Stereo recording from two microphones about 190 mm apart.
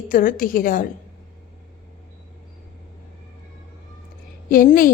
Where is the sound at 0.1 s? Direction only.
45° left (ahead or behind).